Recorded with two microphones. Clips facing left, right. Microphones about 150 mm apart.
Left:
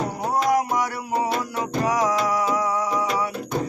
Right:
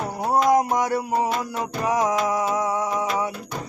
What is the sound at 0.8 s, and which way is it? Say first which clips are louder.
Music: right 2 dB; 25° right (ahead or behind).